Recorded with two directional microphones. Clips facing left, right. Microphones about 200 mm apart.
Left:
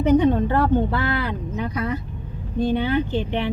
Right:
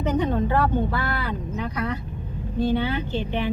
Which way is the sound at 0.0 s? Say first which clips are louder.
Left 6 dB; 15° left (ahead or behind).